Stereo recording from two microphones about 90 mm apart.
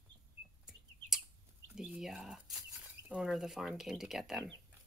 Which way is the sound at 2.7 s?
15° right (ahead or behind).